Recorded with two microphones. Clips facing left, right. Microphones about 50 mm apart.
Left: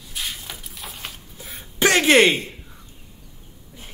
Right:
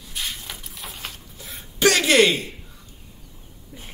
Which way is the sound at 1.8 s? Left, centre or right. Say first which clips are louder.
Left 2 dB; left.